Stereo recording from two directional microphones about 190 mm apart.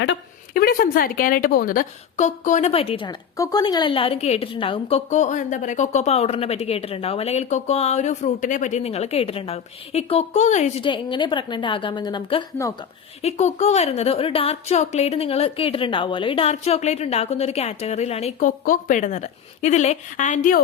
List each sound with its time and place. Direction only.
0.5 s a woman's voice: 50° left (ahead or behind)
10.8 s a woman's voice: 25° left (ahead or behind)
13.2 s a woman's voice: 35° left (ahead or behind)